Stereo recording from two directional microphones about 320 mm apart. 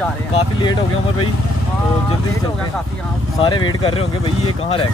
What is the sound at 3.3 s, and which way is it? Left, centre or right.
Speech, centre.